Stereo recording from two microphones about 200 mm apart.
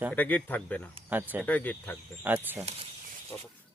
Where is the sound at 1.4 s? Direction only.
10° left (ahead or behind).